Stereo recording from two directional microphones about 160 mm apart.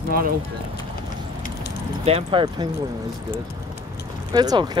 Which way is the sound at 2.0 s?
40° right (ahead or behind).